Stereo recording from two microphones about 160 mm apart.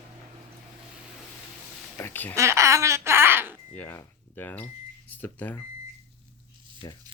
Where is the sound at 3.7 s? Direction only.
15° left (ahead or behind).